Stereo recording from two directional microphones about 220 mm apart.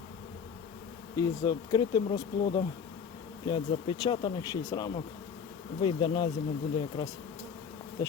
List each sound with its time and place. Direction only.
1.1 s bee: 15° left (ahead or behind)